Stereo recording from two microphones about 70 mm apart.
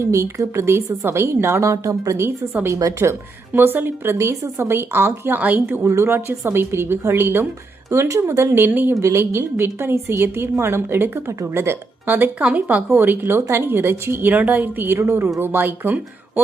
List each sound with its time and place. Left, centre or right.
0.0 s a woman's voice: right
5.4 s speech: right
5.6 s a woman's voice: right
7.9 s a woman's voice: right
9.0 s a woman's voice: right